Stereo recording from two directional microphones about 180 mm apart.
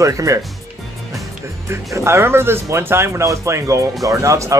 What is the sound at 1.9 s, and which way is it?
Speech, 15° right (ahead or behind).